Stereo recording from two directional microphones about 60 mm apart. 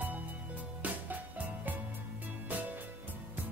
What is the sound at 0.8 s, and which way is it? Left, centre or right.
Music, right.